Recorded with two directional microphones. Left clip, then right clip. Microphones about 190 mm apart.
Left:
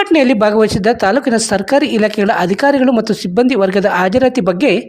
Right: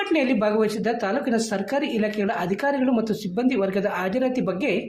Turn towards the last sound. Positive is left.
turn(degrees=50)  # may be behind; listen again after turning